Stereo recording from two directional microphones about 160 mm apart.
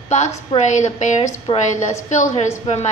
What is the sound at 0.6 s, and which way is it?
A woman's voice, 50° left (ahead or behind).